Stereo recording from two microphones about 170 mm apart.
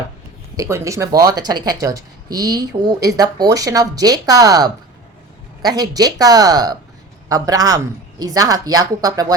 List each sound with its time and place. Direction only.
0.5 s speech: 20° right (ahead or behind)